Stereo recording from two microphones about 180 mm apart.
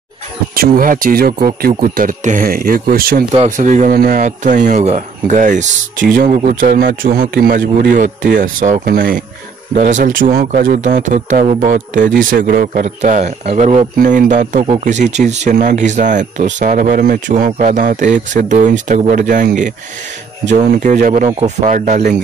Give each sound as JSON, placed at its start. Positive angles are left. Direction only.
{"t": 0.6, "sound": "speech", "side_deg": -50}
{"t": 3.4, "sound": "speech", "side_deg": -45}